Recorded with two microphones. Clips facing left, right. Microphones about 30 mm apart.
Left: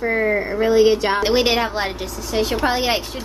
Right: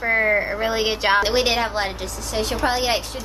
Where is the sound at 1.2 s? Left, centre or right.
Centre.